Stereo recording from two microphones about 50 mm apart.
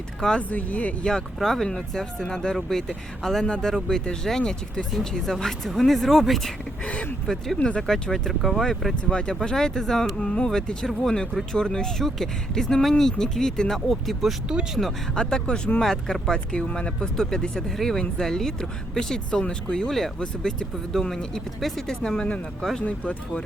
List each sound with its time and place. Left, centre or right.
0.5 s speech: left
1.4 s speech: centre
4.9 s speech: centre
8.3 s speech: centre
9.0 s speech: centre
15.1 s speech: centre
15.8 s speech: centre
16.5 s speech: centre
22.8 s speech: left